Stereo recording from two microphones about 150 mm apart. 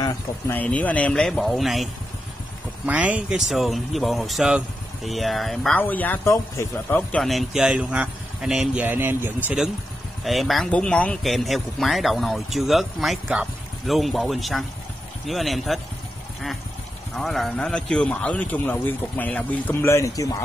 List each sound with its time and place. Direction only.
0.0 s a man's voice: 15° left (ahead or behind)
2.9 s a man's voice: 10° right (ahead or behind); by 7.0 s 20° left (ahead or behind)
7.1 s speech: 5° left (ahead or behind); by 9.6 s 10° right (ahead or behind)
10.2 s speech: centre (ahead or behind)
17.1 s a man's voice: centre (ahead or behind); by 20.4 s 20° left (ahead or behind)